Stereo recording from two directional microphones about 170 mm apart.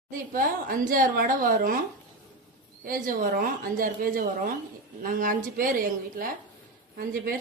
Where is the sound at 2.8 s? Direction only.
55° right (ahead or behind).